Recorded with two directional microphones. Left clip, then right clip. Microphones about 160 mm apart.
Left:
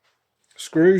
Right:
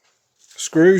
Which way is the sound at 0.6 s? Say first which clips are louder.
Right 3 dB; 30° right (ahead or behind).